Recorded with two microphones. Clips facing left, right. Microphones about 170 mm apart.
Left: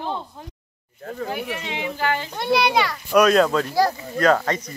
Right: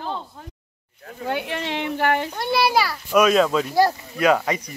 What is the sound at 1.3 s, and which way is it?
A woman's voice, 70° right (ahead or behind).